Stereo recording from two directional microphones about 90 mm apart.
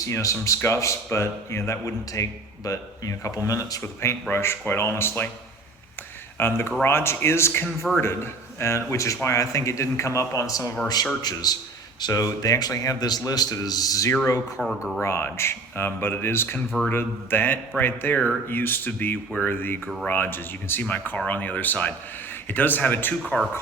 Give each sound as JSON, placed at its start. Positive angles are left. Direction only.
{"t": 0.0, "sound": "speech", "side_deg": 35}
{"t": 6.3, "sound": "a man's voice", "side_deg": 25}